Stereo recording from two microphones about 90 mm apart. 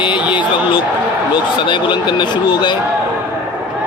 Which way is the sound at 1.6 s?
60° left (ahead or behind).